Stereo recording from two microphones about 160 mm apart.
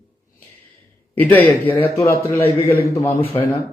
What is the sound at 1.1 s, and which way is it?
A man's voice, 10° left (ahead or behind).